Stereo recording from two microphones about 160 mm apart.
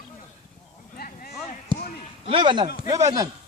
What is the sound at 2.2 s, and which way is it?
Speech, 30° right (ahead or behind).